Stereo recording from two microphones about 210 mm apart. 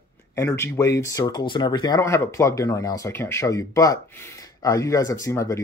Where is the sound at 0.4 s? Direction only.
10° left (ahead or behind).